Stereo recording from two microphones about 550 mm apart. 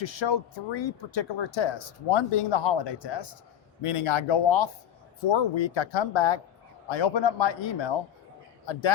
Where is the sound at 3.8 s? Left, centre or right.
Left.